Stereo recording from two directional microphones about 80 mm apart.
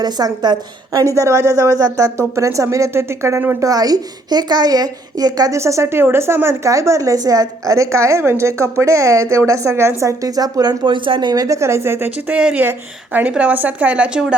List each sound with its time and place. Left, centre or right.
0.0 s a woman's voice: right
0.9 s a woman's voice: right
3.6 s a woman's voice: right
5.5 s a woman's voice: right
12.3 s speech: centre